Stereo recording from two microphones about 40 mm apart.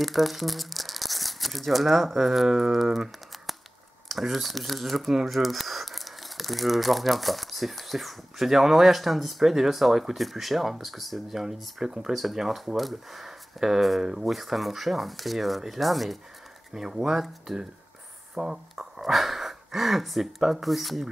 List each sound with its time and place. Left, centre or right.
0.0 s speech: centre
12.2 s speech: centre
16.7 s speech: centre
18.9 s speech: centre